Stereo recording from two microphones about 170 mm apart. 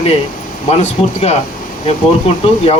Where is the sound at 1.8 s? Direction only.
35° left (ahead or behind).